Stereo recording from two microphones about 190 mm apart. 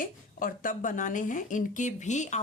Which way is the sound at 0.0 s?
45° left (ahead or behind).